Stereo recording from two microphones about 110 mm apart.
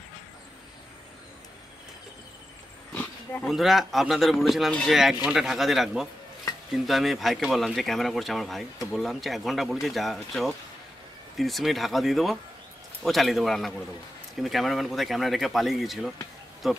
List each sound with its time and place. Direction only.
2.9 s roaring cats: 15° left (ahead or behind)
3.4 s speech: centre (ahead or behind)